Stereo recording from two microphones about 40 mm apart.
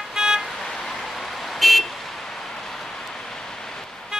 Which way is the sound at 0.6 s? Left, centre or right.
Centre.